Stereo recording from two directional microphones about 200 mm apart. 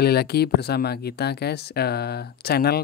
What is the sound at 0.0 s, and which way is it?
Speech, 55° left (ahead or behind).